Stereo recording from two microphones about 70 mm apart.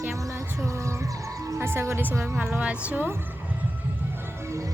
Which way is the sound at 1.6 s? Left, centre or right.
Right.